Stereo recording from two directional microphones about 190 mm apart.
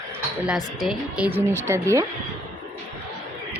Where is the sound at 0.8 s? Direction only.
10° right (ahead or behind).